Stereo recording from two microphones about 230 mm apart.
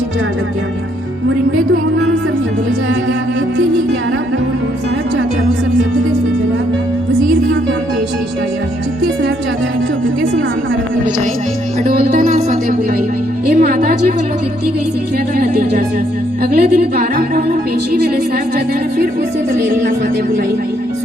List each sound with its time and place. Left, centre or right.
11.9 s music: right
15.4 s music: right